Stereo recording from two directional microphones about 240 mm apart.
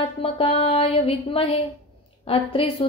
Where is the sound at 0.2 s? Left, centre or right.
Left.